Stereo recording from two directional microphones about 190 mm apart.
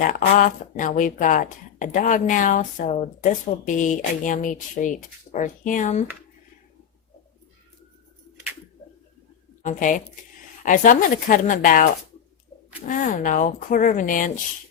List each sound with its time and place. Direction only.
0.0 s speech: 45° left (ahead or behind)
9.6 s speech: 45° left (ahead or behind)
12.9 s speech: 45° left (ahead or behind)